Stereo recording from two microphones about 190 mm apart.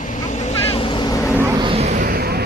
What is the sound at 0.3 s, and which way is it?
Vehicle, 35° left (ahead or behind).